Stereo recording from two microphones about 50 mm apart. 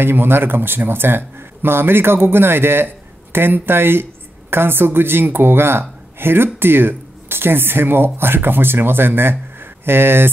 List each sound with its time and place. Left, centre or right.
0.0 s speech: right